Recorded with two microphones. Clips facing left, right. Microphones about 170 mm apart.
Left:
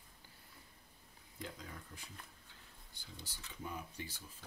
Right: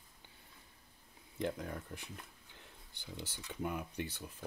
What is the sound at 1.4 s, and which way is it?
Speech, 60° right (ahead or behind).